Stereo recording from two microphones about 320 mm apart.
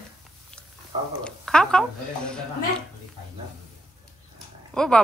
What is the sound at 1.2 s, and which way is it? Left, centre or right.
Speech, centre.